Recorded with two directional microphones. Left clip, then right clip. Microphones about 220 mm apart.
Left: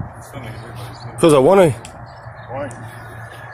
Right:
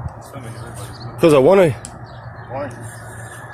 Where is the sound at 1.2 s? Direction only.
15° left (ahead or behind).